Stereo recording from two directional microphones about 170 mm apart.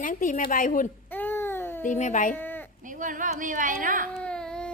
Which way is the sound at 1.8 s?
45° left (ahead or behind).